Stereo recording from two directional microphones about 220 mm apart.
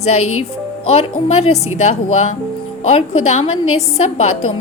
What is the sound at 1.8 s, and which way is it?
A woman's voice, 30° left (ahead or behind).